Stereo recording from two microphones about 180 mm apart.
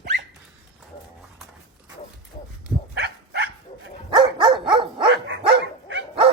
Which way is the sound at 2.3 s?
45° left (ahead or behind).